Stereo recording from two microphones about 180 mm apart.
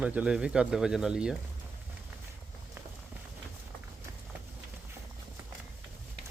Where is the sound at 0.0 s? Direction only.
5° right (ahead or behind).